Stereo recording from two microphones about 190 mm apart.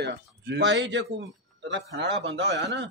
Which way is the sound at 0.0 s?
60° right (ahead or behind).